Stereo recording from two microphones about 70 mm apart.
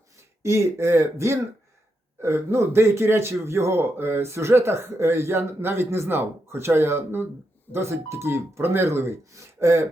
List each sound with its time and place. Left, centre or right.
0.4 s speech: right